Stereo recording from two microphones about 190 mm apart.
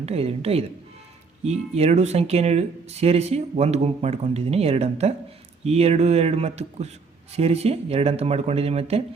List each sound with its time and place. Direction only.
0.0 s speech: 30° right (ahead or behind)